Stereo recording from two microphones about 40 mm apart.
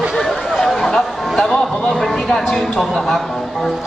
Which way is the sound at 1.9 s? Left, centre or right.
Centre.